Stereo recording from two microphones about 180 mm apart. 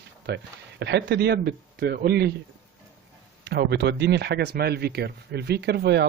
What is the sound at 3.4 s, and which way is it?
Speech, 65° right (ahead or behind).